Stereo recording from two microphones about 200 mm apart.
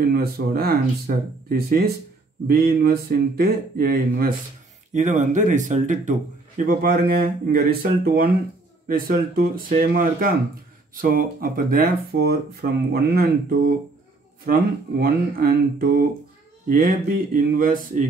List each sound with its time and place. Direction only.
0.1 s speech: 50° right (ahead or behind)
4.9 s speech: 35° right (ahead or behind)